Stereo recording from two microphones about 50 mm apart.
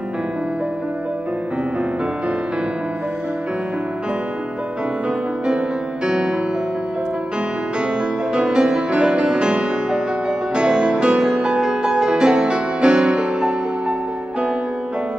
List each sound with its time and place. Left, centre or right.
6.0 s music: right
8.3 s music: centre